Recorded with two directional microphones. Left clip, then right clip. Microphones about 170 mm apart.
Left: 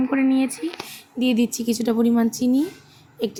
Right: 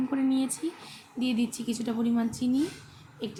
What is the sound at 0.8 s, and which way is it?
Speech, 35° left (ahead or behind).